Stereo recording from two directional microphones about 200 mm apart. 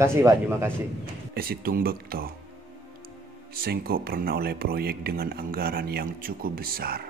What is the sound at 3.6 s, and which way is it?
Speech, 50° right (ahead or behind).